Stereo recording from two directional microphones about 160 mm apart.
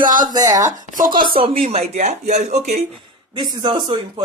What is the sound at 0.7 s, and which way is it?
Speech, 55° right (ahead or behind).